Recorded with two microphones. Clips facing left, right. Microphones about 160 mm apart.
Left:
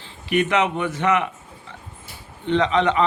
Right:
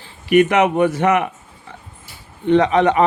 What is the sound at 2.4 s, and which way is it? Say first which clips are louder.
Speech: right 5 dB; 45° right (ahead or behind).